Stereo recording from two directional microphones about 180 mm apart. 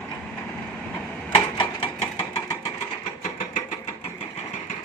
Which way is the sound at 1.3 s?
25° left (ahead or behind).